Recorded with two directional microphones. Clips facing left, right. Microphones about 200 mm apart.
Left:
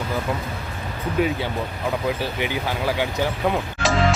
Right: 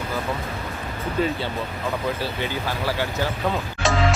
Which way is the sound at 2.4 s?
15° left (ahead or behind).